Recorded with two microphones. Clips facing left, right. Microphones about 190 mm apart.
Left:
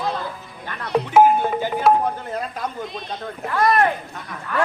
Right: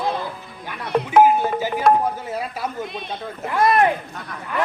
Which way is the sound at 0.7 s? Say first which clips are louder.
Even; 5° right (ahead or behind).